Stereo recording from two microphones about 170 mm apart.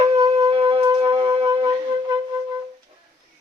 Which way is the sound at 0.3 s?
35° right (ahead or behind).